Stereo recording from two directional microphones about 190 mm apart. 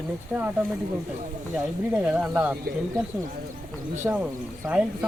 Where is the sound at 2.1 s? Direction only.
10° right (ahead or behind).